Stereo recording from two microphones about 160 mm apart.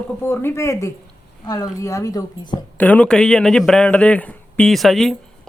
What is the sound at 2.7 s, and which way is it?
A man's voice, 10° left (ahead or behind).